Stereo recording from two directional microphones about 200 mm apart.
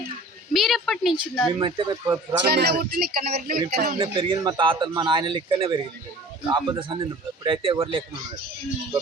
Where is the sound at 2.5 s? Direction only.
55° right (ahead or behind).